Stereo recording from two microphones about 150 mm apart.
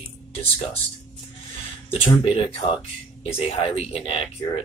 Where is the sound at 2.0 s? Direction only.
35° left (ahead or behind).